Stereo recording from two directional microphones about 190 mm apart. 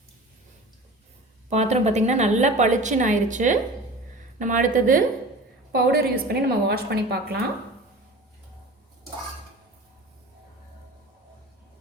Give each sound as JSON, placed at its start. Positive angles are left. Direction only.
{"t": 1.5, "sound": "a woman's voice", "side_deg": -35}
{"t": 5.7, "sound": "a woman's voice", "side_deg": -55}